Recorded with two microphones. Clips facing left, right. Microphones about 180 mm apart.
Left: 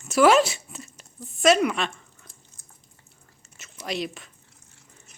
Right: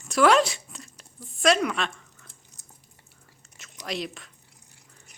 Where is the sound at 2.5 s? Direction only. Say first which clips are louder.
Right 1 dB; 35° right (ahead or behind).